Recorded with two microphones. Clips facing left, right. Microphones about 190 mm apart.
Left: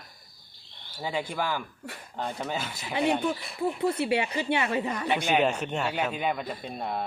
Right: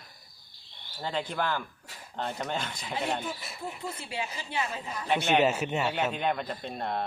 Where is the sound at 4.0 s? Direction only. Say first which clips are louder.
Left 10 dB; 70° left (ahead or behind).